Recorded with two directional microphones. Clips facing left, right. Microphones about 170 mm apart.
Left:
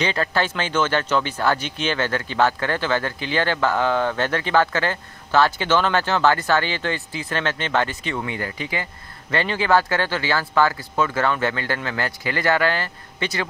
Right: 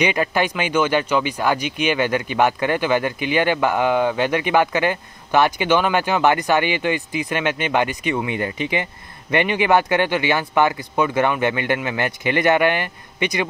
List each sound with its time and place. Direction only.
0.0 s speech: 15° right (ahead or behind)